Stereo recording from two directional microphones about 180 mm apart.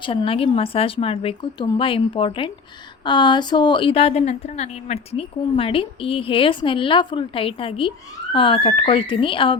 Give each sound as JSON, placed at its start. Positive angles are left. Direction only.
{"t": 0.0, "sound": "a woman's voice", "side_deg": 30}